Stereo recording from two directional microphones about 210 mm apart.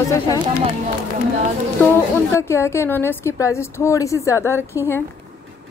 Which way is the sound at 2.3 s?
10° left (ahead or behind).